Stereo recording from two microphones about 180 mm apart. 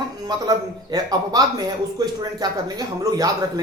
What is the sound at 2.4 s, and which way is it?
Speech, 20° right (ahead or behind).